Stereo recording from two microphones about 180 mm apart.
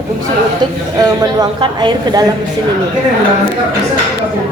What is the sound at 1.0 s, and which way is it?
Speech, 20° right (ahead or behind).